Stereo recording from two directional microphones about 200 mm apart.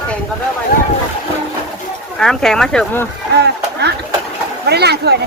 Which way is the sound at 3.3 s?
55° right (ahead or behind).